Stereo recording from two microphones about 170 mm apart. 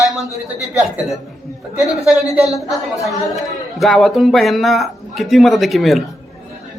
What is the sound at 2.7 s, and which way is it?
Speech, centre (ahead or behind).